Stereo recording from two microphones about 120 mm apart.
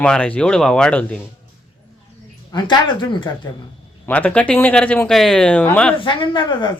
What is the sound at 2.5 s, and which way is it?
Speech, 35° left (ahead or behind).